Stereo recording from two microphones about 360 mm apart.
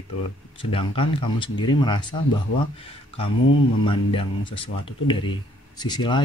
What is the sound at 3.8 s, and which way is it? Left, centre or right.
Speech, centre.